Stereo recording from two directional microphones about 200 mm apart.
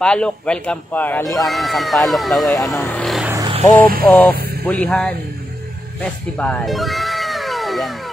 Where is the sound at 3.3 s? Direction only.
20° right (ahead or behind).